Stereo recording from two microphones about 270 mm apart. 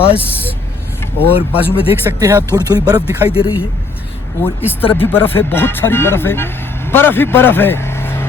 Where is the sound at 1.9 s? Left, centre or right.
Centre.